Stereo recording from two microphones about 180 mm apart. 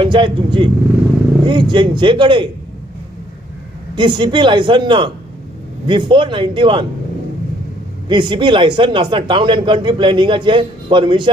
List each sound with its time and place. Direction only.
0.0 s speech: 25° right (ahead or behind)
3.9 s speech: 25° right (ahead or behind)
8.1 s speech: 25° right (ahead or behind)